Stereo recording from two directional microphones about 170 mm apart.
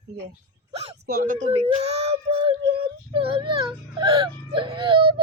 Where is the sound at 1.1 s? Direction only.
50° right (ahead or behind).